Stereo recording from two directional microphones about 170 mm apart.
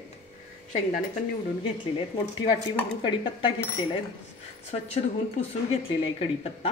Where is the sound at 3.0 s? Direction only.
30° left (ahead or behind).